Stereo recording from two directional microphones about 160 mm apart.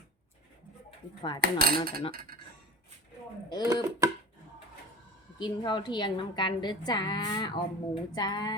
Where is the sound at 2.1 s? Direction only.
65° right (ahead or behind).